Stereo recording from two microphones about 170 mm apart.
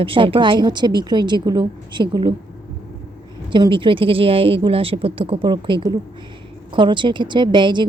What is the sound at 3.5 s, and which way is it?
A woman's voice, 30° right (ahead or behind).